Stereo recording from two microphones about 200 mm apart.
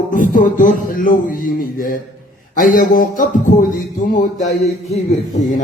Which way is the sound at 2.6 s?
40° left (ahead or behind).